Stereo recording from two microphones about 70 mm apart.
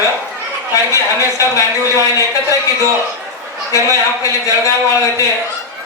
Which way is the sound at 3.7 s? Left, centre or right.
Left.